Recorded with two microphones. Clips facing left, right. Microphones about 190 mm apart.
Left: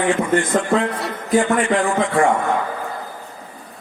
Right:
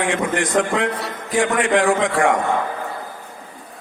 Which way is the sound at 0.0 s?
85° right.